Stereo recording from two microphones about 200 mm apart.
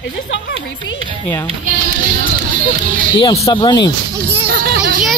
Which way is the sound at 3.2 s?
25° left (ahead or behind).